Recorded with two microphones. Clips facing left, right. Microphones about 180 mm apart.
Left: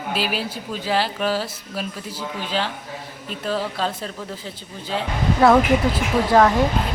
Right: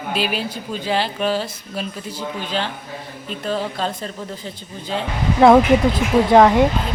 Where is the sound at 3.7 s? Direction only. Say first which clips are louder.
Right 1 dB; 5° left (ahead or behind).